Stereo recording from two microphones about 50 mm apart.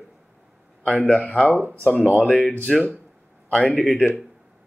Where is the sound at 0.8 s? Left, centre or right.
Left; by 2.8 s centre.